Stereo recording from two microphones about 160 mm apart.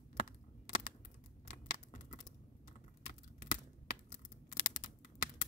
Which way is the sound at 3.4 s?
55° left (ahead or behind).